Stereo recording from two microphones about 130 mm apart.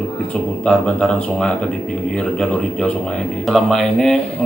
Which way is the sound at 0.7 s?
5° left (ahead or behind).